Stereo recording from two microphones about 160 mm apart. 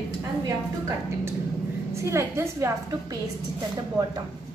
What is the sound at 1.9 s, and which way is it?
A woman's voice, 15° right (ahead or behind).